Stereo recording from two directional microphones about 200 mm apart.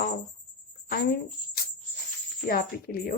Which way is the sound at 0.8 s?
50° left (ahead or behind).